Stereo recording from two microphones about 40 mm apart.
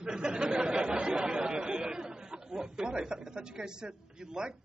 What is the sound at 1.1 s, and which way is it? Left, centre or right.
Chatter, centre.